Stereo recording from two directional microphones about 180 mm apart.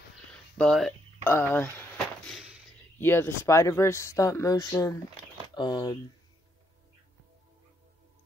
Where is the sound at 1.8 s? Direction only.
Centre (ahead or behind).